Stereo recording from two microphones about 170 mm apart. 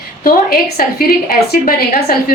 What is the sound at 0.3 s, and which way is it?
A woman's voice, 55° left (ahead or behind).